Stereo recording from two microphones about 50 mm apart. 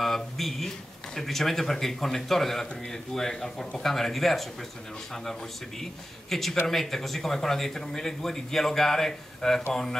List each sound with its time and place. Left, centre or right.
0.0 s speech: centre